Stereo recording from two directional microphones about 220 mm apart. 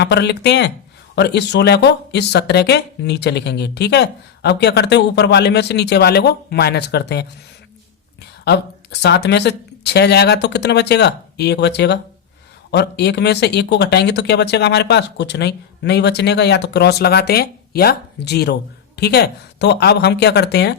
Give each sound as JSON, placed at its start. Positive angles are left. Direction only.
{"t": 0.0, "sound": "speech", "side_deg": 50}